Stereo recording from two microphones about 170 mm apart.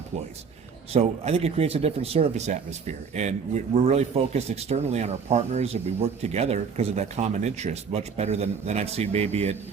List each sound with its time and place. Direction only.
0.9 s speech: 40° right (ahead or behind)